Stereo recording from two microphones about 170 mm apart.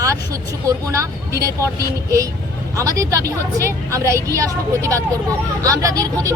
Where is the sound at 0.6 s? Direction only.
20° right (ahead or behind).